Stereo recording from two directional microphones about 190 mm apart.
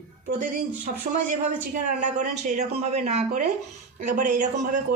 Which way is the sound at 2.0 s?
40° right (ahead or behind).